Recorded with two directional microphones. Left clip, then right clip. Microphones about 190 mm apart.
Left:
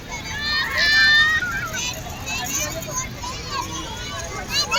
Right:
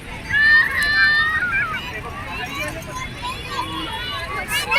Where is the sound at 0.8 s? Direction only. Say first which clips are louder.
Left 1 dB; 35° right (ahead or behind).